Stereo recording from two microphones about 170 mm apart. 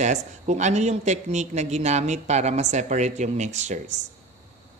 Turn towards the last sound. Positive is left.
turn(degrees=-45)  # may be behind; listen again after turning